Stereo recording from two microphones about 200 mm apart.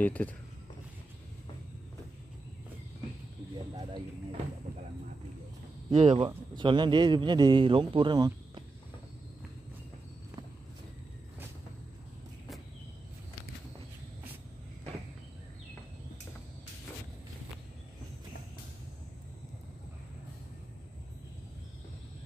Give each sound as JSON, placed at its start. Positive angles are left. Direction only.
{"t": 0.0, "sound": "speech", "side_deg": 10}
{"t": 5.9, "sound": "a man's voice", "side_deg": -25}